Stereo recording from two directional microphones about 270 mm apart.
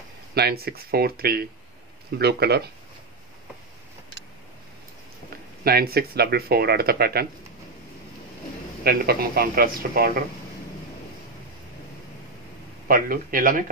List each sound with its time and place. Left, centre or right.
0.3 s speech: right
5.6 s speech: right
8.8 s speech: right
12.8 s speech: right